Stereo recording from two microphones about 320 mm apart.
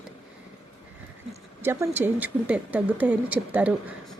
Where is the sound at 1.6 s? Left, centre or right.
Centre.